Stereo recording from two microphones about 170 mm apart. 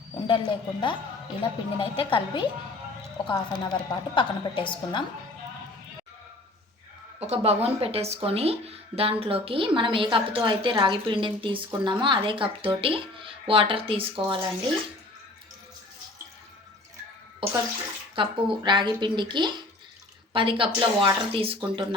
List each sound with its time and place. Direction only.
0.3 s a woman's voice: 30° left (ahead or behind)
7.2 s speech: 35° right (ahead or behind)
18.1 s speech: 30° right (ahead or behind)